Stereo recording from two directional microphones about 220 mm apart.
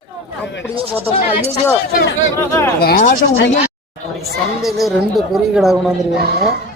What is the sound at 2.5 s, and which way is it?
Speech, 10° left (ahead or behind).